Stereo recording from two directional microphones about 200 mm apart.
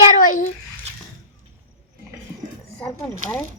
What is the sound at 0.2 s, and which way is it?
Babbling, 40° left (ahead or behind).